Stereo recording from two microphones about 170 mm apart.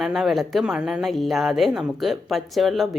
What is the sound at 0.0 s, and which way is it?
Speech, centre (ahead or behind).